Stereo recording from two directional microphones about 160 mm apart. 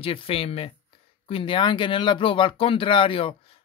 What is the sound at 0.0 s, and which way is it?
Speech, 35° left (ahead or behind).